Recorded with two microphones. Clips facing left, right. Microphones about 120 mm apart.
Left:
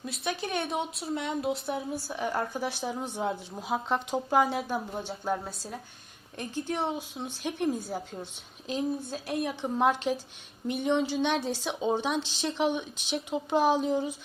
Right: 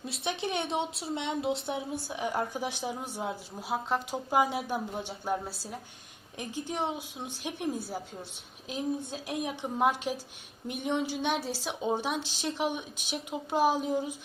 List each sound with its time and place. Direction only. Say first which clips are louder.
0.0 s a woman's voice: even; 25° right (ahead or behind)
3.2 s a woman's voice: left 4 dB; centre (ahead or behind)